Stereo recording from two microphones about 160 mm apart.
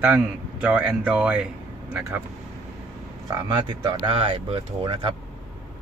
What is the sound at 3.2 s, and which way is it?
Speech, 30° right (ahead or behind).